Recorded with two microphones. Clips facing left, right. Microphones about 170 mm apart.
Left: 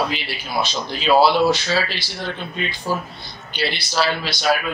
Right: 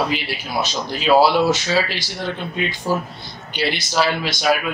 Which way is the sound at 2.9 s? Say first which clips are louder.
Right 3 dB; 15° right (ahead or behind).